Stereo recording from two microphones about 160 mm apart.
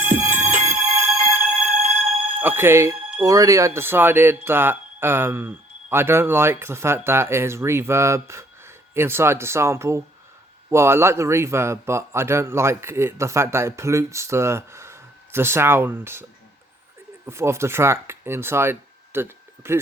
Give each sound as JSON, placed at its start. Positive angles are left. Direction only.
{"t": 0.4, "sound": "music", "side_deg": -50}
{"t": 1.5, "sound": "a sound", "side_deg": -50}
{"t": 2.4, "sound": "speech", "side_deg": -15}
{"t": 17.2, "sound": "speech", "side_deg": -15}